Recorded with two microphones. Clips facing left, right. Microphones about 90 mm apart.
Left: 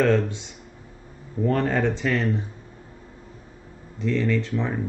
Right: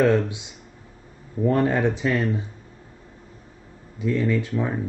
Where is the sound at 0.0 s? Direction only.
15° right (ahead or behind).